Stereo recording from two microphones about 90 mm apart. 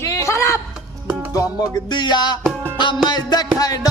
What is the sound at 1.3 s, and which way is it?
Music, 50° left (ahead or behind).